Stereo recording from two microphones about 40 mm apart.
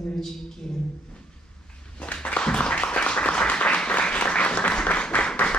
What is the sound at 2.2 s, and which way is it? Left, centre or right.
Applause, left.